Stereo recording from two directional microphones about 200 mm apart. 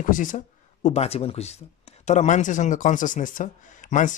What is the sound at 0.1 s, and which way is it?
Speech, 40° left (ahead or behind).